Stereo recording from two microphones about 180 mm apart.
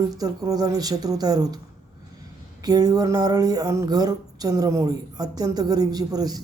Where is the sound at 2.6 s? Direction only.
20° right (ahead or behind).